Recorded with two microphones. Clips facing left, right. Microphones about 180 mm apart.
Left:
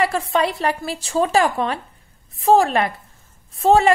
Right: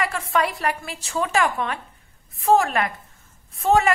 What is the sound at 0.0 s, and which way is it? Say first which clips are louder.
A woman's voice: left 4 dB; 30° left (ahead or behind).